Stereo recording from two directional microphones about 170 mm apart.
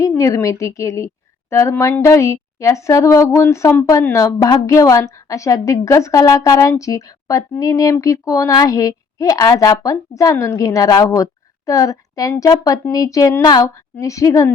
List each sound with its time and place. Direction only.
0.2 s a woman's voice: 20° left (ahead or behind)